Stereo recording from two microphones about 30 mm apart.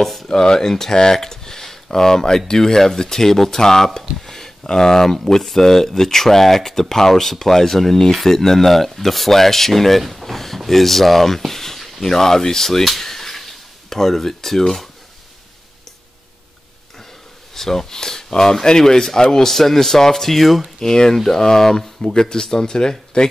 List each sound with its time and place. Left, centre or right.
0.0 s speech: centre
0.3 s speech: left
13.0 s a sound: centre
17.6 s speech: centre
19.3 s speech: centre
20.8 s speech: left